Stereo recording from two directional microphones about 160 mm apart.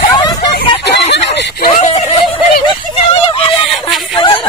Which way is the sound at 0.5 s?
90° left.